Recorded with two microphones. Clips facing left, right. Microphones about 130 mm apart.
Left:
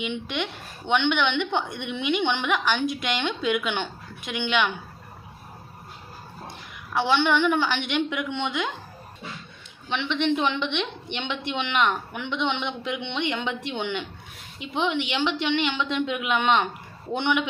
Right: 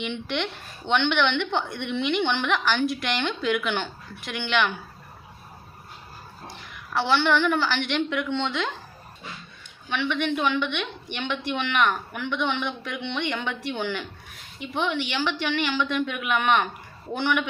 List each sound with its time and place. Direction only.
0.0 s a woman's voice: 15° left (ahead or behind)
6.9 s a woman's voice: 15° left (ahead or behind)
9.9 s a woman's voice: 25° left (ahead or behind)